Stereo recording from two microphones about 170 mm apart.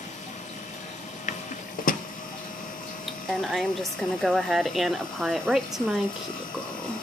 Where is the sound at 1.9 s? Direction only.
55° left (ahead or behind).